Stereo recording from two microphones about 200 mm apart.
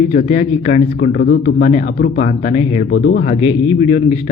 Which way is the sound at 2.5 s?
40° left (ahead or behind).